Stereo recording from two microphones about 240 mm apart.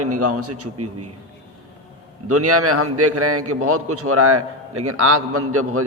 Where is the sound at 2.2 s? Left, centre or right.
Right.